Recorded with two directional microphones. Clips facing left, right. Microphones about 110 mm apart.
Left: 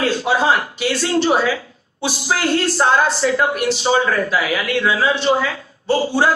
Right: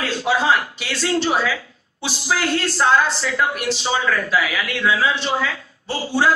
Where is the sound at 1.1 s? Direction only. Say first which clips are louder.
Left 3 dB; 35° left (ahead or behind).